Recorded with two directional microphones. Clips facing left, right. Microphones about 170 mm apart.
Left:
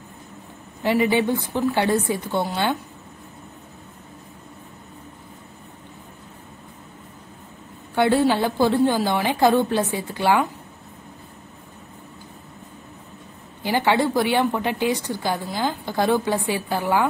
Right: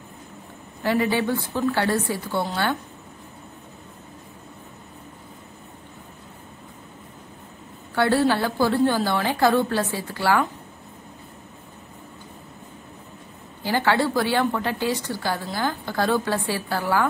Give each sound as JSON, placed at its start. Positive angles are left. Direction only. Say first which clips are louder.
{"t": 0.8, "sound": "a woman's voice", "louder": "left 2 dB", "side_deg": 20}
{"t": 7.9, "sound": "a woman's voice", "louder": "left 2 dB", "side_deg": 20}
{"t": 13.6, "sound": "a woman's voice", "louder": "left 1 dB", "side_deg": 15}